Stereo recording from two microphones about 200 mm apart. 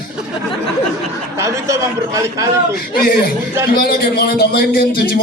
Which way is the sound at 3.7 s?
50° left (ahead or behind).